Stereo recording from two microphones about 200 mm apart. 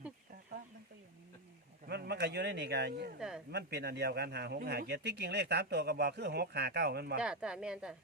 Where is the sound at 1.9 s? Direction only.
55° right (ahead or behind).